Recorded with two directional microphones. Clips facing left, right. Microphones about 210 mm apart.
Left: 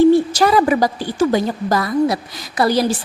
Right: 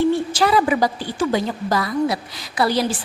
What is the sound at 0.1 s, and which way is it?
A woman's voice, 40° left (ahead or behind).